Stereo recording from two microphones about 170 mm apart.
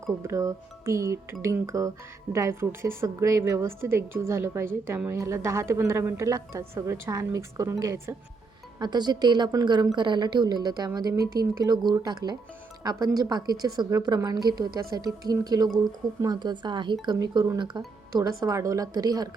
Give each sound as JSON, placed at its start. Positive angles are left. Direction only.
{"t": 0.2, "sound": "a woman's voice", "side_deg": -15}